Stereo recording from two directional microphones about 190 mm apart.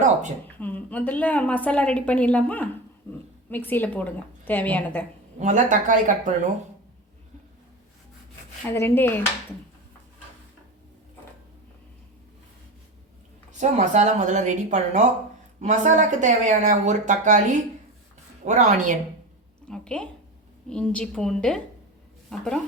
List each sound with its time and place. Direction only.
0.6 s speech: 10° left (ahead or behind)
5.4 s speech: 40° right (ahead or behind)
8.6 s speech: 10° left (ahead or behind)
13.6 s speech: 35° right (ahead or behind)
18.4 s speech: 40° right (ahead or behind)
19.6 s a woman's voice: 5° left (ahead or behind)